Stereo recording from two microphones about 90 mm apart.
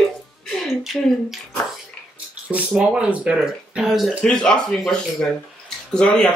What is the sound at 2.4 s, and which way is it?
Speech, 15° right (ahead or behind).